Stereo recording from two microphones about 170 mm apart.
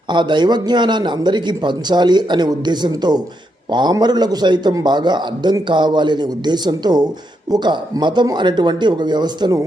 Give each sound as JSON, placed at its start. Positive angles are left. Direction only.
{"t": 0.1, "sound": "a man's voice", "side_deg": -25}